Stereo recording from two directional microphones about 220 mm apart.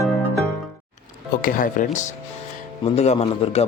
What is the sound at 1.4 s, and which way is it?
A man's voice, 40° left (ahead or behind).